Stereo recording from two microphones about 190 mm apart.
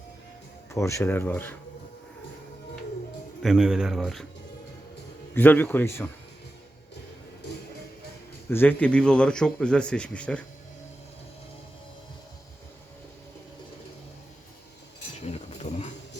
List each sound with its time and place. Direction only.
0.7 s speech: 15° left (ahead or behind)
3.4 s a man's voice: 5° right (ahead or behind)
5.3 s speech: 10° left (ahead or behind)
8.4 s a man's voice: 10° left (ahead or behind)
15.3 s a sound: 35° left (ahead or behind)